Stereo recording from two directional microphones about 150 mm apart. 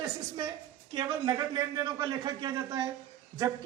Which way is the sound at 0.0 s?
25° right (ahead or behind).